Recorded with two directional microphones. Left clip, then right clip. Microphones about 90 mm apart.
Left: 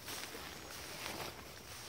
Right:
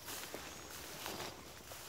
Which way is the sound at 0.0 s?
20° right (ahead or behind).